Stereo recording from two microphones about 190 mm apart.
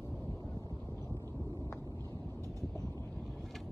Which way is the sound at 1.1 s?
15° left (ahead or behind).